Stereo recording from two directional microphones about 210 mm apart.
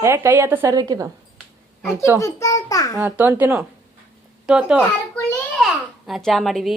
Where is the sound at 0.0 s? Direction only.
10° right (ahead or behind).